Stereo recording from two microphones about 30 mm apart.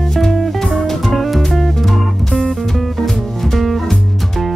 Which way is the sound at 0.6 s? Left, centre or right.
Centre.